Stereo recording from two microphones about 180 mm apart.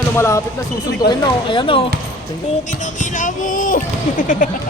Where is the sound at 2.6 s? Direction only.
45° left (ahead or behind).